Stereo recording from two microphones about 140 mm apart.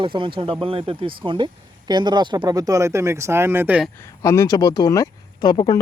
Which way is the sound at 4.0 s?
20° left (ahead or behind).